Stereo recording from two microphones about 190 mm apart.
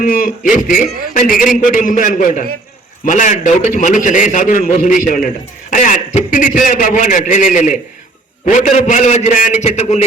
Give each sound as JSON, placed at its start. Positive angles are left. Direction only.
{"t": 0.0, "sound": "a man's voice", "side_deg": 45}